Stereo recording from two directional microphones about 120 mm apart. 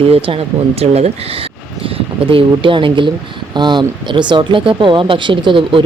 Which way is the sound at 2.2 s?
45° right (ahead or behind).